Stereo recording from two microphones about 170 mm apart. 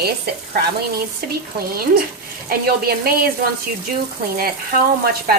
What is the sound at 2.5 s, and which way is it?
Speech, 65° right (ahead or behind).